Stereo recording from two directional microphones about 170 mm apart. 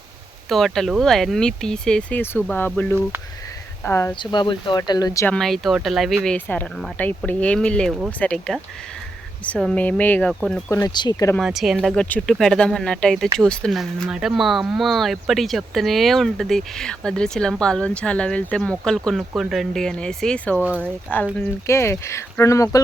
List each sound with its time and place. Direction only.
0.4 s speech: centre (ahead or behind)
4.1 s speech: 25° left (ahead or behind)
5.2 s speech: 5° left (ahead or behind)
10.7 s speech: 20° left (ahead or behind)
11.3 s speech: centre (ahead or behind); by 22.8 s 20° left (ahead or behind)